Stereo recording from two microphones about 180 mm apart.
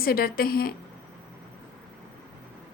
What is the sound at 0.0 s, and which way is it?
Speech, 55° left (ahead or behind).